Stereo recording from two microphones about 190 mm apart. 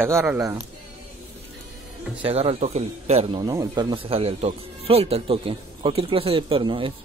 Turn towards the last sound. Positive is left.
turn(degrees=-25)  # may be behind; listen again after turning